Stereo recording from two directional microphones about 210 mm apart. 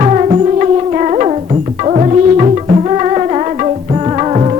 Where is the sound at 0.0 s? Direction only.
30° right (ahead or behind).